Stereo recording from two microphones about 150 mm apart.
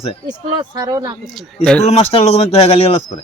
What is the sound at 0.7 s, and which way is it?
Speech, 25° right (ahead or behind).